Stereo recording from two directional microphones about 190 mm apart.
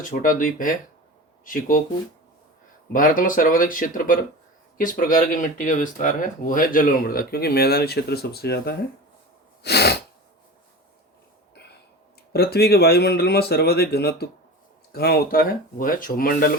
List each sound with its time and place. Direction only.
0.0 s speech: 45° left (ahead or behind)
2.9 s speech: 45° left (ahead or behind)
12.3 s speech: 55° left (ahead or behind)